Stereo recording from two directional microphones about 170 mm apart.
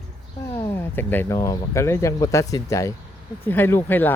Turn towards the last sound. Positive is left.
turn(degrees=10)  # may be behind; listen again after turning